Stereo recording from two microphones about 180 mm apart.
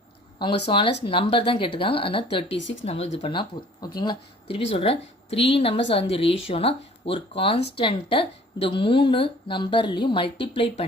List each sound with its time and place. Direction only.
0.7 s speech: 25° left (ahead or behind)
2.6 s speech: 90° left
2.8 s speech: 35° left (ahead or behind)